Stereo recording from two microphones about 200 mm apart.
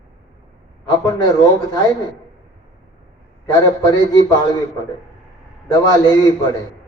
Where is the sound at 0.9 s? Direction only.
20° left (ahead or behind).